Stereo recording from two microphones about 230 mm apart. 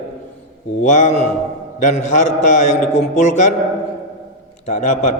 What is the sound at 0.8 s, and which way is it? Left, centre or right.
A man's voice, left.